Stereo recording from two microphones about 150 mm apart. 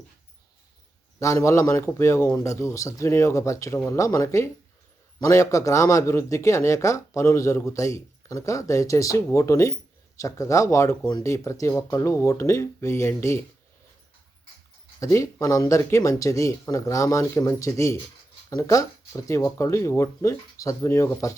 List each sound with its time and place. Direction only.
1.2 s speech: 20° left (ahead or behind)
15.0 s speech: 20° left (ahead or behind)